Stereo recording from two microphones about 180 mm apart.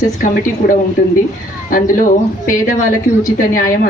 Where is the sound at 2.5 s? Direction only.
45° left (ahead or behind).